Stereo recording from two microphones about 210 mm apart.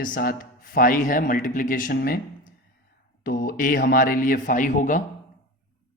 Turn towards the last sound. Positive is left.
turn(degrees=40)  # may be behind; listen again after turning